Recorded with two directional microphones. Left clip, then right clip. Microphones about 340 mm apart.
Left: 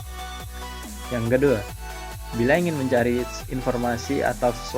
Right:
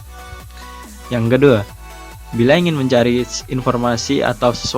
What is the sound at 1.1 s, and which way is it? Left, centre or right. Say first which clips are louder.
Speech: right 8 dB; right.